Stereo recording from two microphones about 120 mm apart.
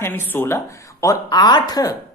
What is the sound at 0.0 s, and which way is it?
Speech, 15° left (ahead or behind).